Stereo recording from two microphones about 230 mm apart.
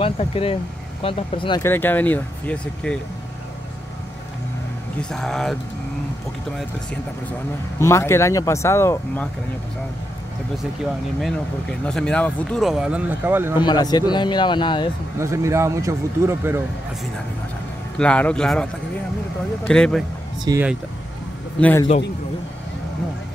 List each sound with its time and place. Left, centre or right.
0.0 s speech: left
1.6 s speech: centre
4.9 s speech: centre
7.8 s speech: centre
11.8 s speech: centre
13.6 s speech: centre
15.1 s speech: centre
17.9 s speech: centre
20.4 s speech: centre
21.5 s speech: centre